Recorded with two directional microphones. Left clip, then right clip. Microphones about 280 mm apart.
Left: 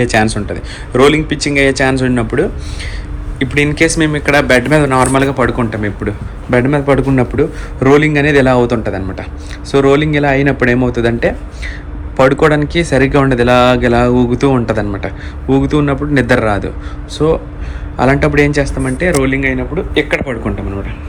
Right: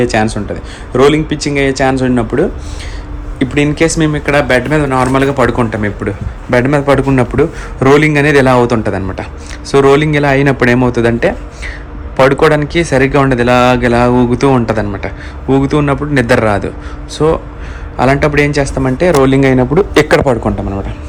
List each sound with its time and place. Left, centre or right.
0.0 s a man's voice: centre
19.4 s a man's voice: right
20.2 s speech: centre